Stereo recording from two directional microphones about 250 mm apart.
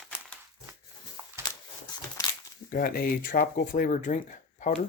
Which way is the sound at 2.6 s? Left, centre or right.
Left.